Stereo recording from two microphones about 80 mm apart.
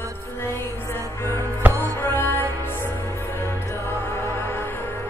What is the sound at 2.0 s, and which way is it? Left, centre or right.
Music, left.